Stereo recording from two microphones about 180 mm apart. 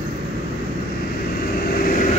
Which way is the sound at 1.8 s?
50° left (ahead or behind).